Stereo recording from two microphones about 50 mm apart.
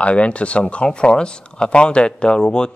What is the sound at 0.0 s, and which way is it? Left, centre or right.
Speech, left.